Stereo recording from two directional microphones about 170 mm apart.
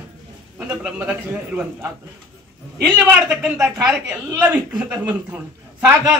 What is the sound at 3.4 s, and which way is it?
A woman's voice, 5° right (ahead or behind).